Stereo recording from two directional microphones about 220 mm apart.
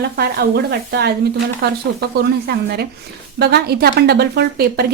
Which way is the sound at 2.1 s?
45° right (ahead or behind).